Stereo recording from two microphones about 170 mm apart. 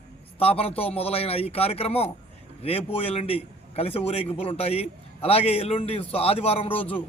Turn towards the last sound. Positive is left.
turn(degrees=35)  # may be behind; listen again after turning